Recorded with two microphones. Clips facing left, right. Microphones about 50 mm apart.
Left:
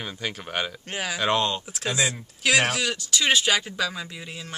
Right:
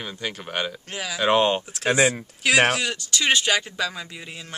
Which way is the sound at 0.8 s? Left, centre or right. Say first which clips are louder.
Left 1 dB; left.